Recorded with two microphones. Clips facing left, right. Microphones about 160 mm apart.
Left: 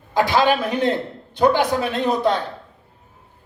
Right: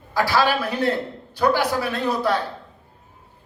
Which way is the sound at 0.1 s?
20° left (ahead or behind).